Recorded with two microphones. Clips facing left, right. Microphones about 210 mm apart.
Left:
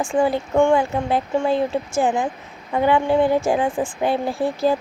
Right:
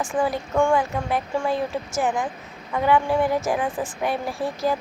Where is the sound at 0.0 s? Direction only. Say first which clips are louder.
Left 4 dB; 30° left (ahead or behind).